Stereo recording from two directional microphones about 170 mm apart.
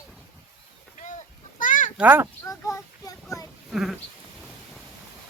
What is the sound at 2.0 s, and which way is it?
Speech, 10° right (ahead or behind).